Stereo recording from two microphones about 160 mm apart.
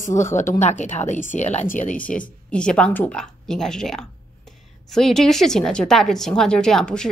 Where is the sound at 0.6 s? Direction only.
45° left (ahead or behind).